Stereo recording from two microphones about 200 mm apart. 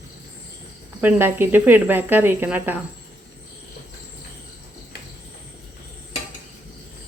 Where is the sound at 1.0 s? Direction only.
10° right (ahead or behind).